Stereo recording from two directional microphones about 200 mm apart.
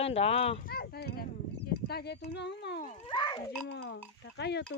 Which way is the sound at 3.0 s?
20° left (ahead or behind).